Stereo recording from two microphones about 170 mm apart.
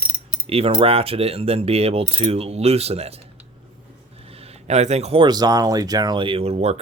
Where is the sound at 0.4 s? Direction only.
35° right (ahead or behind).